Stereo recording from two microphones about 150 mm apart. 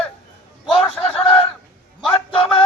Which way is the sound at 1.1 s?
40° left (ahead or behind).